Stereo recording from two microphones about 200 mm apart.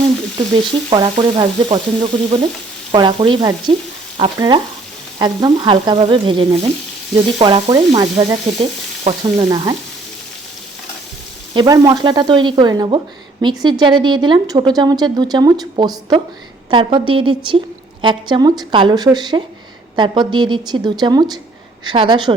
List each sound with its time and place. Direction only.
0.3 s speech: 25° right (ahead or behind)
11.5 s speech: 20° right (ahead or behind)